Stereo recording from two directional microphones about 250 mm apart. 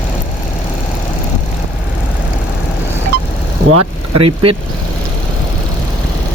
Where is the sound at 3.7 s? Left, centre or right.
Right.